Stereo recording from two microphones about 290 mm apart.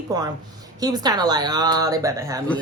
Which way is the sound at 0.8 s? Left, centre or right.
Centre.